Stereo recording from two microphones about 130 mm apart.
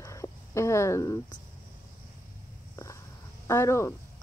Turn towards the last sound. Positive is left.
turn(degrees=20)  # may be behind; listen again after turning